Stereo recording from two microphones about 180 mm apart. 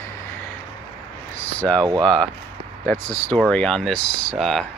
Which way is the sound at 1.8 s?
25° right (ahead or behind).